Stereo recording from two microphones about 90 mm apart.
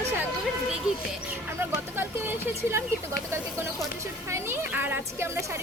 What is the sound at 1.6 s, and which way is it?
Speech, 25° right (ahead or behind).